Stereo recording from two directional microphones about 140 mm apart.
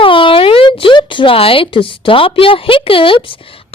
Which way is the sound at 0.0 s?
40° left (ahead or behind).